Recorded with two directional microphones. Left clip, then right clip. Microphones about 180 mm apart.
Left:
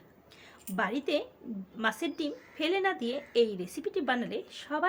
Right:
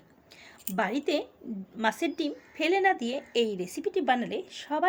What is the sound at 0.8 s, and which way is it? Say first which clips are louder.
A woman's voice: right 2 dB; 20° right (ahead or behind).